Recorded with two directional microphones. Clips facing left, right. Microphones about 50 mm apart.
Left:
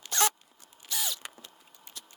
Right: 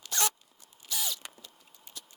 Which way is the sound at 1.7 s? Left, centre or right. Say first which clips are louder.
Left 1 dB; left.